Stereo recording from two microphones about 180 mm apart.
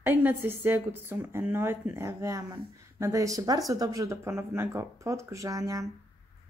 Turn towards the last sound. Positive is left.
turn(degrees=-20)  # may be behind; listen again after turning